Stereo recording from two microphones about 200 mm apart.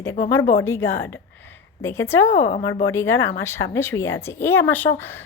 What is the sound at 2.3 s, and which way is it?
Speech, 35° left (ahead or behind).